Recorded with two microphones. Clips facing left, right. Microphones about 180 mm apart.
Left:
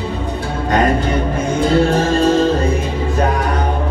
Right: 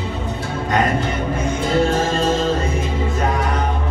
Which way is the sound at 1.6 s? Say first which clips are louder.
Left 4 dB; 35° left (ahead or behind).